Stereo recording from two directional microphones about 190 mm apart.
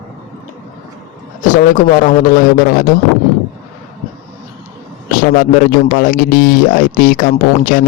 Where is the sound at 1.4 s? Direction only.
45° left (ahead or behind).